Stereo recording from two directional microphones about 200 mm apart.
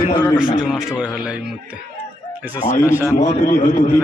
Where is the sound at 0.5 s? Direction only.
5° right (ahead or behind).